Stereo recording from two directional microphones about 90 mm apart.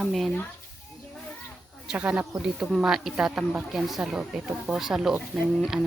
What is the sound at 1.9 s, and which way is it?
Speech, 15° right (ahead or behind).